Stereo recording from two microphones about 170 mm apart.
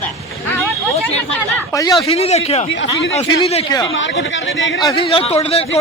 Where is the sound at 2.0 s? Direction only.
35° left (ahead or behind).